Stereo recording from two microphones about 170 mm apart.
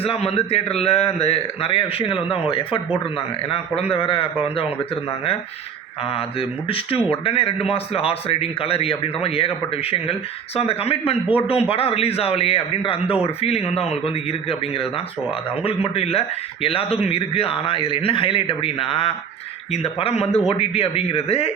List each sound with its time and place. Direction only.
0.0 s speech: 35° left (ahead or behind)
6.1 s speech: 30° left (ahead or behind)